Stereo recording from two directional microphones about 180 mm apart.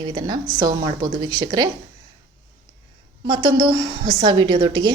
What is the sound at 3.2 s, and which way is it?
A woman's voice, 20° right (ahead or behind).